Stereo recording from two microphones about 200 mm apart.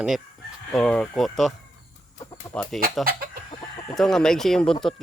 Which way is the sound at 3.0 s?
45° right (ahead or behind).